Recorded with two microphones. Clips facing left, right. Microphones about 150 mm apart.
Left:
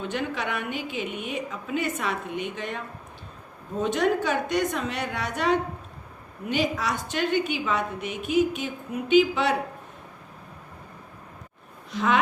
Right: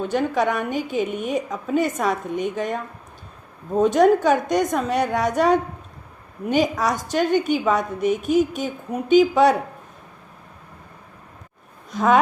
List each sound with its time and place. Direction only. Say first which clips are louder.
0.0 s a woman's voice: right 8 dB; 45° right (ahead or behind)
11.9 s speech: right 6 dB; 45° right (ahead or behind)